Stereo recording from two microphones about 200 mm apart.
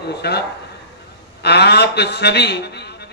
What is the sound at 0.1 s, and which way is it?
A man's voice, 55° left (ahead or behind).